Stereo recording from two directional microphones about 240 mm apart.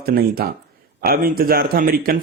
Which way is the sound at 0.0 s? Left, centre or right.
Right.